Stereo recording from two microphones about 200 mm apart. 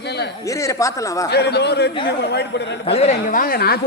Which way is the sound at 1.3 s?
55° left (ahead or behind).